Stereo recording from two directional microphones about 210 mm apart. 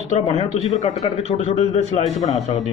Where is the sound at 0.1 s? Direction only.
30° left (ahead or behind).